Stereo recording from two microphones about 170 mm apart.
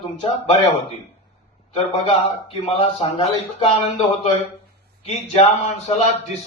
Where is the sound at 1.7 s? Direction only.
35° left (ahead or behind).